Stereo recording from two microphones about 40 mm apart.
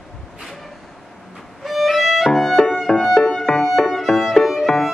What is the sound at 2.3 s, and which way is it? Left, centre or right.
Violin, centre.